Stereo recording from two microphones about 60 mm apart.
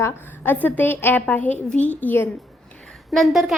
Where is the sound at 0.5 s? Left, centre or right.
Left.